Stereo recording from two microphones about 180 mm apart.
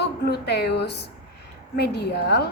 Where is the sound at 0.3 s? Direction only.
65° left (ahead or behind).